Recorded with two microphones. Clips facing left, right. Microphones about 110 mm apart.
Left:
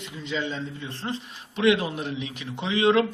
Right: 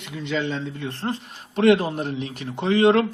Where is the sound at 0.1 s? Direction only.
65° right (ahead or behind).